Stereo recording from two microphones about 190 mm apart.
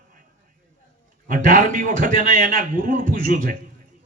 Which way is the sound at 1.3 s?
45° right (ahead or behind).